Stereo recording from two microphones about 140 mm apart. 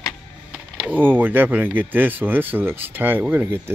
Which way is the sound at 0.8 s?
15° right (ahead or behind).